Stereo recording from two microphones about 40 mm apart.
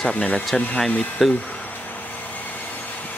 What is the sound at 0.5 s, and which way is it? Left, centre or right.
Speech, centre.